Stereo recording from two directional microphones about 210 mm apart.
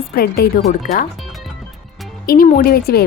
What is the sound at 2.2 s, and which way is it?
Speech, 45° left (ahead or behind).